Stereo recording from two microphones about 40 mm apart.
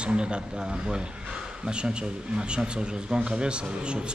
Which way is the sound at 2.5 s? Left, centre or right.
Right.